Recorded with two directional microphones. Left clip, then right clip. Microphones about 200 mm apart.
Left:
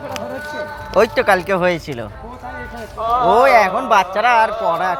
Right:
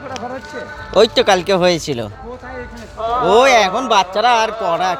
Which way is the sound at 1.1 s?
40° right (ahead or behind).